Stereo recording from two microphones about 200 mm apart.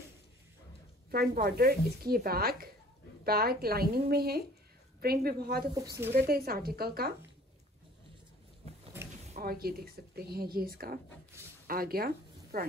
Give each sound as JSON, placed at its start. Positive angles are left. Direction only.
{"t": 1.1, "sound": "speech", "side_deg": -50}
{"t": 5.8, "sound": "speech", "side_deg": -15}
{"t": 6.1, "sound": "speech", "side_deg": -50}
{"t": 8.6, "sound": "a sound", "side_deg": -30}
{"t": 9.4, "sound": "a woman's voice", "side_deg": -50}